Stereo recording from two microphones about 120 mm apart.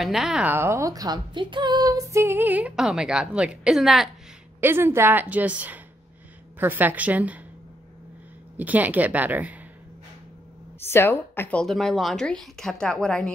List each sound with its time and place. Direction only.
0.0 s a woman's voice: 5° right (ahead or behind)
0.5 s speech: 20° right (ahead or behind); by 4.1 s centre (ahead or behind)
4.6 s speech: 20° right (ahead or behind)
8.5 s speech: 15° right (ahead or behind)
10.8 s a woman's voice: 20° left (ahead or behind)
11.6 s a woman's voice: centre (ahead or behind)